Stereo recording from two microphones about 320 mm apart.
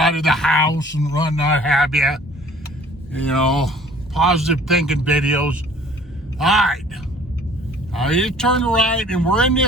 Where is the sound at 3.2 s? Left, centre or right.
Centre.